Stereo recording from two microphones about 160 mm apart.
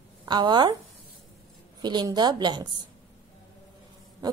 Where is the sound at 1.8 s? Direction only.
25° right (ahead or behind).